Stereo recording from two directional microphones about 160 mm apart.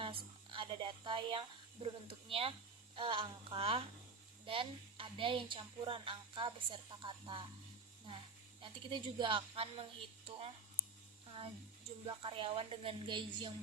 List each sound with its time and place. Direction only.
0.0 s speech: 35° right (ahead or behind)
8.6 s speech: 30° right (ahead or behind)